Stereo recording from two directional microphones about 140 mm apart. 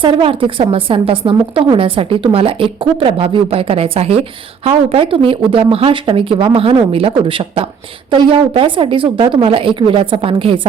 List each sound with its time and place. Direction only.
0.0 s a woman's voice: 40° right (ahead or behind)